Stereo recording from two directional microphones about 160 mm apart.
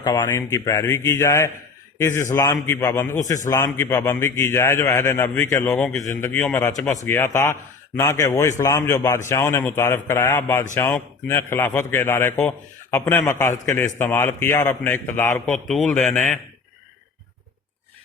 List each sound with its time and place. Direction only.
0.0 s a man's voice: 20° left (ahead or behind)
6.0 s speech: 20° left (ahead or behind)
6.3 s a man's voice: 5° left (ahead or behind)
6.6 s a man's voice: 20° left (ahead or behind)
15.4 s a man's voice: centre (ahead or behind)